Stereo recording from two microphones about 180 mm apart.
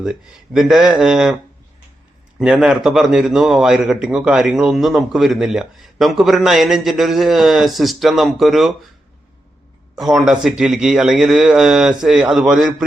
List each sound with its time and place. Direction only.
0.0 s a man's voice: 5° right (ahead or behind)
2.4 s a man's voice: 5° right (ahead or behind)
9.9 s a man's voice: centre (ahead or behind)